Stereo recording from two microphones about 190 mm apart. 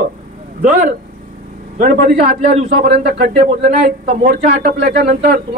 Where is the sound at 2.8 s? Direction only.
55° right (ahead or behind).